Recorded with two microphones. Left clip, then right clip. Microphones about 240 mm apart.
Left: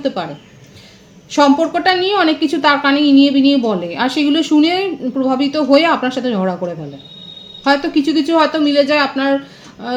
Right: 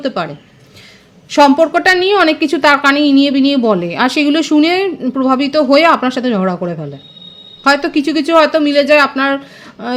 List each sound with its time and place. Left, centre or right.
0.0 s a woman's voice: right
1.3 s a woman's voice: right